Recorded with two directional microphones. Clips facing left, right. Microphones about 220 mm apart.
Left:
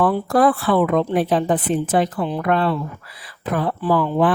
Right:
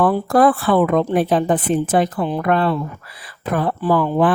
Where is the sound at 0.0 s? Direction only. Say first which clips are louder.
Right 2 dB; 50° right (ahead or behind).